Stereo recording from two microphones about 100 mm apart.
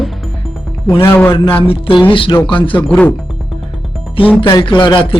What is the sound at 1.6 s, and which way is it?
Speech, 65° left (ahead or behind).